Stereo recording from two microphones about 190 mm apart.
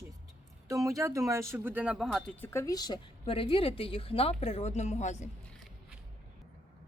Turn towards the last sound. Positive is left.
turn(degrees=40)  # may be behind; listen again after turning